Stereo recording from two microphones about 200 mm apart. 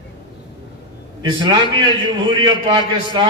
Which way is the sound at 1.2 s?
20° right (ahead or behind).